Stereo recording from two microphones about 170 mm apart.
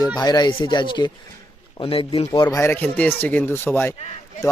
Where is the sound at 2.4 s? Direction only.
15° left (ahead or behind).